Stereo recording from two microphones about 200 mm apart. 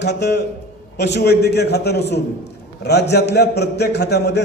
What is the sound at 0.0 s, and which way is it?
A man's voice, 60° left (ahead or behind).